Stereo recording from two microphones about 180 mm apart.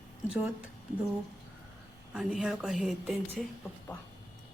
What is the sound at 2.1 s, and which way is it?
A woman's voice, 5° right (ahead or behind).